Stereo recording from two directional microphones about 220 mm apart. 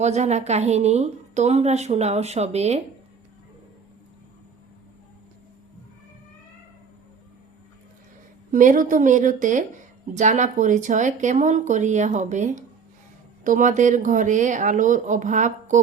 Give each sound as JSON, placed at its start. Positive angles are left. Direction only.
{"t": 0.0, "sound": "a woman's voice", "side_deg": -30}
{"t": 8.5, "sound": "speech", "side_deg": -35}